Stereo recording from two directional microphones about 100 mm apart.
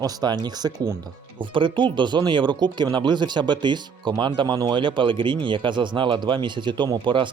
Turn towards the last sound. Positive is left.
turn(degrees=-55)  # may be behind; listen again after turning